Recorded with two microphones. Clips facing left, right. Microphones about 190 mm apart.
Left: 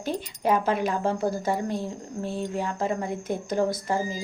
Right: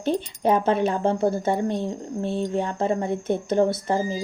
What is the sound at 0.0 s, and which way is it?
Speech, 25° right (ahead or behind).